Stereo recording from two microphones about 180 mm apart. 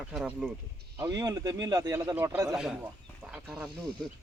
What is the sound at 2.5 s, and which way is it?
Speech, 5° right (ahead or behind).